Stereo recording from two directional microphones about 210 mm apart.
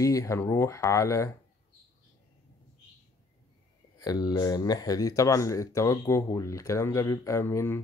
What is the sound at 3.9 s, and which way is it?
Speech, 20° left (ahead or behind).